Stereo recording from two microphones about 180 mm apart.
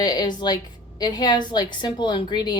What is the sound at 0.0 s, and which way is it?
A woman's voice, 20° left (ahead or behind).